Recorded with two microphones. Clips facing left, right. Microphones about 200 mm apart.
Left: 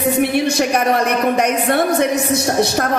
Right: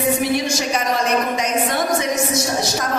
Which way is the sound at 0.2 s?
60° left (ahead or behind).